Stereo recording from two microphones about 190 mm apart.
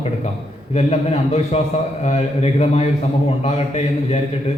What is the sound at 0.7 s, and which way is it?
A man's voice, 30° left (ahead or behind).